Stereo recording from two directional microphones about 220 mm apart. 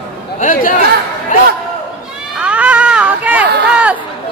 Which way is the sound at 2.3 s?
5° right (ahead or behind).